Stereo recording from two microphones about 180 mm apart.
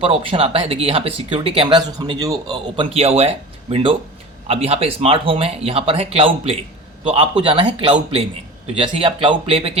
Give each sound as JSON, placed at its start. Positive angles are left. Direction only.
{"t": 0.0, "sound": "speech", "side_deg": -30}